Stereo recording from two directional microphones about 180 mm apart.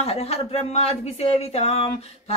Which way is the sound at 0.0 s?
35° left (ahead or behind).